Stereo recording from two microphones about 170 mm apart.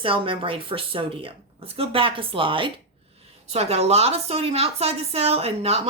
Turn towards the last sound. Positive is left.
turn(degrees=-35)  # may be behind; listen again after turning